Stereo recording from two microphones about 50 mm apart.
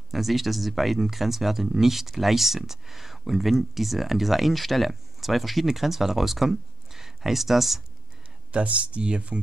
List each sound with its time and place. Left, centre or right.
0.1 s speech: centre
8.5 s speech: right